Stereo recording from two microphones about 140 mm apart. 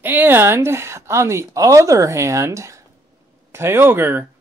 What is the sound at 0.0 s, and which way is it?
A man's voice, 15° right (ahead or behind).